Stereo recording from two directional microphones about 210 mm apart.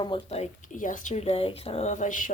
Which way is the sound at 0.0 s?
25° left (ahead or behind).